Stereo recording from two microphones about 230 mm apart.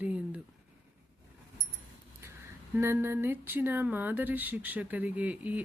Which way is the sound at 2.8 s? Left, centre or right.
Centre.